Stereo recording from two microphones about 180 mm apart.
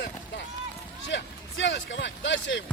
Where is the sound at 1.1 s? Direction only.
85° left.